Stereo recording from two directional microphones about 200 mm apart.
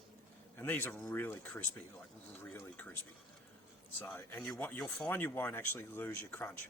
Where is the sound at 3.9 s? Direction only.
10° left (ahead or behind).